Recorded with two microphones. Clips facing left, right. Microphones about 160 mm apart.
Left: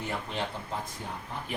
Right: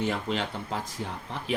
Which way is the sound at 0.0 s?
90° right.